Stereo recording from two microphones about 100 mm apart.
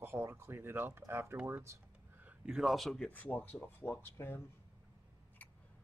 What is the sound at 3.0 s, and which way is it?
Speech, 15° left (ahead or behind).